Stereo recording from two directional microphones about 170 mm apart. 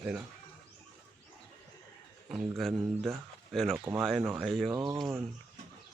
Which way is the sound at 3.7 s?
15° right (ahead or behind).